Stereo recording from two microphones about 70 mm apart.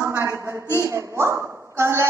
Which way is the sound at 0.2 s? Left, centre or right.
Right.